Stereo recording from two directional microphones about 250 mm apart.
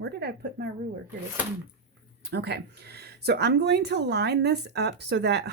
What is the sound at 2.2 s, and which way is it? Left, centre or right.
Speech, right.